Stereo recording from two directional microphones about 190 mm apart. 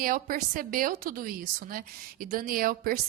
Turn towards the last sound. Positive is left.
turn(degrees=-50)  # may be behind; listen again after turning